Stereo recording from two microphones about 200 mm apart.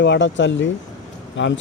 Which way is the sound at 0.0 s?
65° left (ahead or behind).